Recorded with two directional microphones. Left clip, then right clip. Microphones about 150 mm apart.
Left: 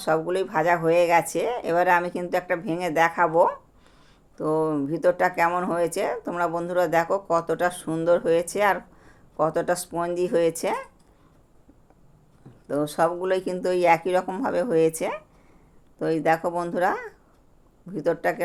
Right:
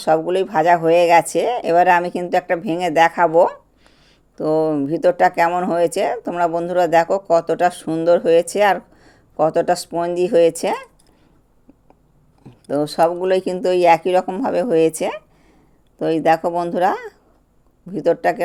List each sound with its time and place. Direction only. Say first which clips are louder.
0.0 s speech: right 7 dB; 35° right (ahead or behind)
12.6 s speech: right 6 dB; 35° right (ahead or behind)